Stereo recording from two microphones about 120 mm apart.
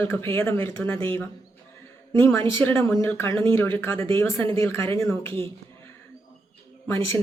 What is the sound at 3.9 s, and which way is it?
Speech, 50° right (ahead or behind).